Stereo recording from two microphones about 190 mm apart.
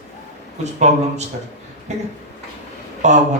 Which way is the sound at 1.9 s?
35° right (ahead or behind).